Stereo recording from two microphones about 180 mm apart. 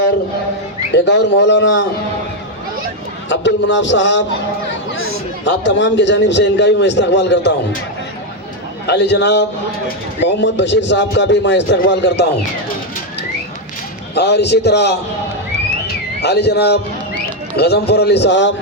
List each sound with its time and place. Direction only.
0.9 s a man's voice: 80° left
3.2 s a sound: 85° left
5.5 s a man's voice: 85° left
8.9 s a man's voice: 70° left (ahead or behind)
14.2 s a man's voice: 70° left (ahead or behind)